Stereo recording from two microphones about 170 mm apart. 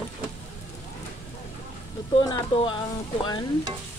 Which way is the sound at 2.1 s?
30° left (ahead or behind).